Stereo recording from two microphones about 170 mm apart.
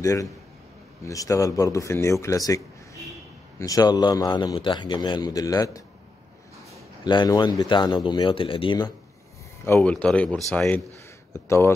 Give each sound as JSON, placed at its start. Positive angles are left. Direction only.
{"t": 0.0, "sound": "a man's voice", "side_deg": 20}
{"t": 7.1, "sound": "a man's voice", "side_deg": 25}
{"t": 9.8, "sound": "speech", "side_deg": 5}